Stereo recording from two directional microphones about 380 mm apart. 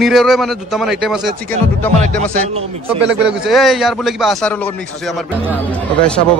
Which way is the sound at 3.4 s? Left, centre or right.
Centre.